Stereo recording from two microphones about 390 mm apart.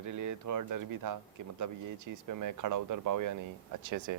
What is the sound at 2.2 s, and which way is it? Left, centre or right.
Speech, right.